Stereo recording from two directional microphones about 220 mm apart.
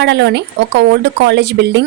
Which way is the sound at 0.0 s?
50° right (ahead or behind).